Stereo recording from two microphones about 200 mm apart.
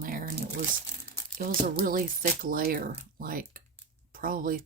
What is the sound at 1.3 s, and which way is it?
Speech, 45° right (ahead or behind).